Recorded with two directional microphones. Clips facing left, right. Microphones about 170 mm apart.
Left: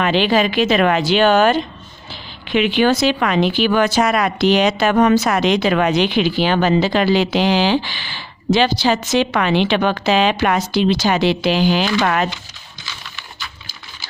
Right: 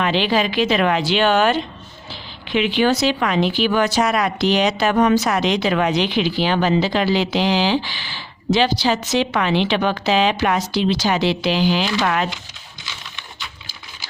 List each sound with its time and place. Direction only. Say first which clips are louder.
0.0 s speech: left 3 dB; 55° left (ahead or behind)
2.5 s speech: left 2 dB; 60° left (ahead or behind)